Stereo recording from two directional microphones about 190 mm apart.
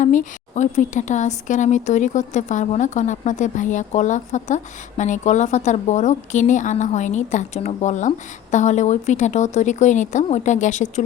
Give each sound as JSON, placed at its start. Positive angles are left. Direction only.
{"t": 0.0, "sound": "speech", "side_deg": 40}